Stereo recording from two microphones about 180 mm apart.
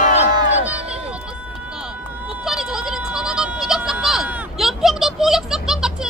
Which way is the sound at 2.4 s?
Centre (ahead or behind).